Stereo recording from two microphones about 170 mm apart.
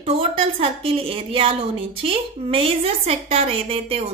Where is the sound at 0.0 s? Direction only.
30° right (ahead or behind).